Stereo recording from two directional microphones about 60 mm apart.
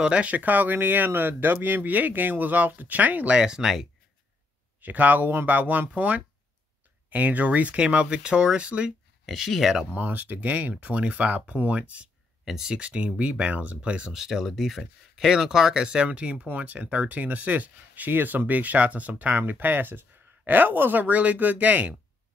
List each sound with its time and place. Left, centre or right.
0.0 s speech: centre
3.3 s speech: centre
4.7 s speech: right
9.2 s speech: centre
9.9 s speech: right
12.4 s speech: centre
14.1 s speech: centre; by 21.9 s right